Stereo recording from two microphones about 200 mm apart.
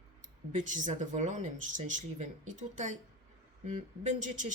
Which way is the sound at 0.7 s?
40° right (ahead or behind).